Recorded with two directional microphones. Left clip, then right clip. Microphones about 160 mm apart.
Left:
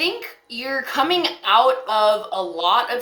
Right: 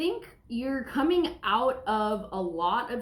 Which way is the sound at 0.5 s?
15° left (ahead or behind).